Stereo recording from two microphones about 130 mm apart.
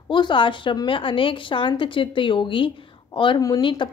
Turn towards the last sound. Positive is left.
turn(degrees=40)  # may be behind; listen again after turning